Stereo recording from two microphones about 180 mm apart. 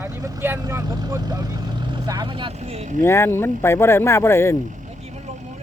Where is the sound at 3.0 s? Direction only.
15° left (ahead or behind).